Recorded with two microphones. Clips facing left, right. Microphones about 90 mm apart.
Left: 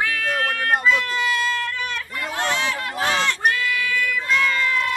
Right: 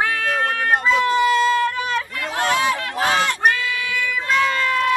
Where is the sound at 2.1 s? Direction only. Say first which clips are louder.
Right 1 dB; centre (ahead or behind).